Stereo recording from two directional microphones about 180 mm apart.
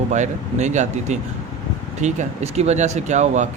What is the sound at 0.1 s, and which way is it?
Speech, 40° right (ahead or behind).